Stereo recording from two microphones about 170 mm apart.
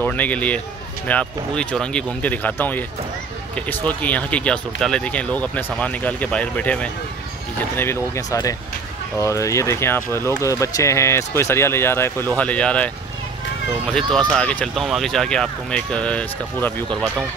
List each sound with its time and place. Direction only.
0.0 s speech: 10° left (ahead or behind)
14.1 s speech: 5° left (ahead or behind)